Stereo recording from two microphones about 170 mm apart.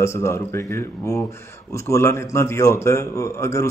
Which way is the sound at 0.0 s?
15° left (ahead or behind).